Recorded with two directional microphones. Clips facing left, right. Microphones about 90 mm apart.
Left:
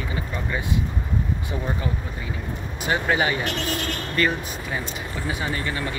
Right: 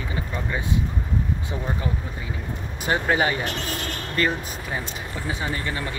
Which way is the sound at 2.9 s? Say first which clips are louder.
Even; 40° right (ahead or behind).